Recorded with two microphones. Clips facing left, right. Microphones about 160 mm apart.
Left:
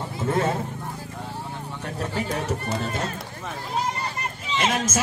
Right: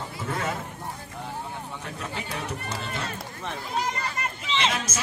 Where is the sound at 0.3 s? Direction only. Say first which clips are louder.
Left 7 dB; 30° left (ahead or behind).